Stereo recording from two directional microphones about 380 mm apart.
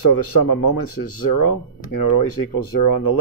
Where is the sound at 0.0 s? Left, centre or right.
Left.